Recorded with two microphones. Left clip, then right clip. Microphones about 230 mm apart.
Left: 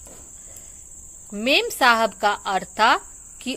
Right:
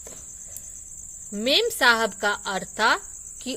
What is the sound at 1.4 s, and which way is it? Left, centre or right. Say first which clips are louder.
Speech: left 2 dB; right.